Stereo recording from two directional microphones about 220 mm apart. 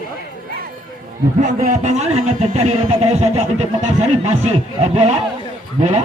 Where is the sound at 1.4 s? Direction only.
35° right (ahead or behind).